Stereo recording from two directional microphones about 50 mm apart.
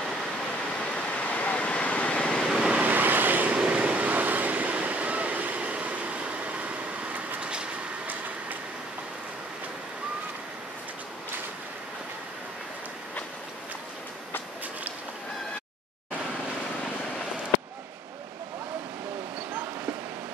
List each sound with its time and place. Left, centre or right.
0.9 s vehicle: left
2.4 s vehicle: centre
2.7 s vehicle: right
3.5 s vehicle: right